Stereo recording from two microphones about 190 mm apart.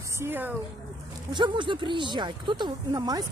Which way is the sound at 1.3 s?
25° right (ahead or behind).